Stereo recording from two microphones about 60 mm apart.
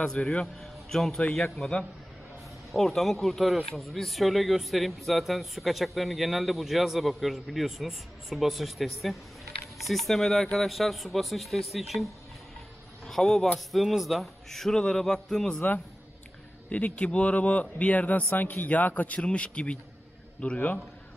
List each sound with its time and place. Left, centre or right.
0.0 s a man's voice: centre
1.2 s a man's voice: centre
2.7 s a man's voice: centre
16.6 s a man's voice: left